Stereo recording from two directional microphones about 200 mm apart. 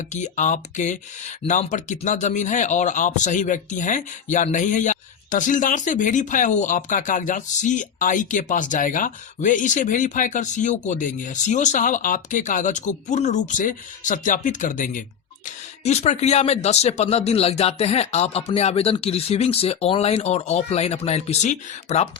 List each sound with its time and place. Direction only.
0.1 s speech: 40° left (ahead or behind)